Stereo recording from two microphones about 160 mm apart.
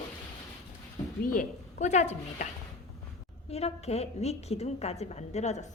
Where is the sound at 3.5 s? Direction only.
40° left (ahead or behind).